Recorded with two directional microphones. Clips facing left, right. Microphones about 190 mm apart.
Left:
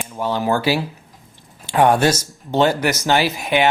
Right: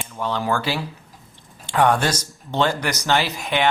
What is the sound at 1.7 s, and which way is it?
Speech, 10° left (ahead or behind).